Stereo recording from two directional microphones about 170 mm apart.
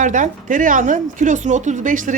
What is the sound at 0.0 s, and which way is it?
Speech, 50° right (ahead or behind).